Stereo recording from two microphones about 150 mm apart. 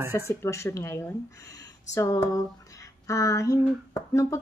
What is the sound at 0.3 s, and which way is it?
A woman's voice, 20° left (ahead or behind).